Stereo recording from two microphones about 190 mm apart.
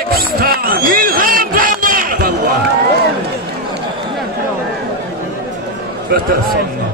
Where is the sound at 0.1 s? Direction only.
50° right (ahead or behind).